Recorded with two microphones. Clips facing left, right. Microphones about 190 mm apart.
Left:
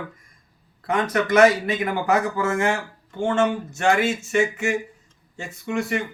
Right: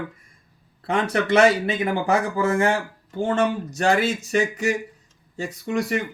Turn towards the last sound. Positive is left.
turn(degrees=-40)  # may be behind; listen again after turning